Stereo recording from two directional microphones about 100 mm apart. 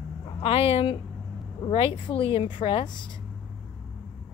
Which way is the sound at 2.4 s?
50° left (ahead or behind).